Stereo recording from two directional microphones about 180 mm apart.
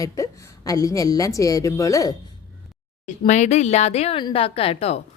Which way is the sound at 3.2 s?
40° left (ahead or behind).